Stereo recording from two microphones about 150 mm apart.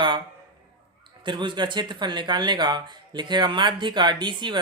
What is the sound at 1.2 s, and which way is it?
Speech, 30° right (ahead or behind).